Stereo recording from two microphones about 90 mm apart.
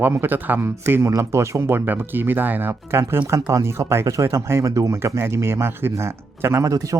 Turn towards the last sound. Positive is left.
turn(degrees=-35)  # may be behind; listen again after turning